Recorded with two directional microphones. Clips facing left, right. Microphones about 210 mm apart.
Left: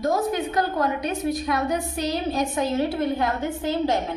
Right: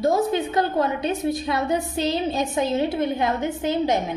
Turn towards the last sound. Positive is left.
turn(degrees=-20)  # may be behind; listen again after turning